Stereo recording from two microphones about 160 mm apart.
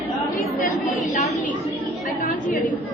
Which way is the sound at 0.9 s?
55° left (ahead or behind).